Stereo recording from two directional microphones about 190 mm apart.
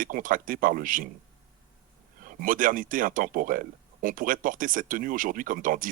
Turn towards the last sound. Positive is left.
turn(degrees=-45)  # may be behind; listen again after turning